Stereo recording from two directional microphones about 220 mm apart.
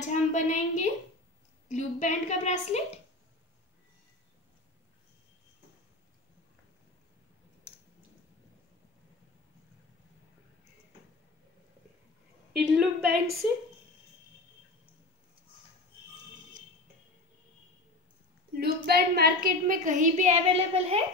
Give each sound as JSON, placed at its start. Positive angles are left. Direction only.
{"t": 0.1, "sound": "a sound", "side_deg": 35}
{"t": 1.7, "sound": "a woman's voice", "side_deg": 30}
{"t": 12.5, "sound": "a woman's voice", "side_deg": 0}
{"t": 18.6, "sound": "a woman's voice", "side_deg": -45}